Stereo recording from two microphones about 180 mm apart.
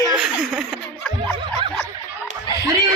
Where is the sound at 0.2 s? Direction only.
5° right (ahead or behind).